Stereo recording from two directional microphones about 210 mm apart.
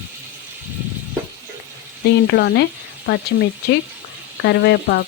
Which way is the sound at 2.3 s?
50° left (ahead or behind).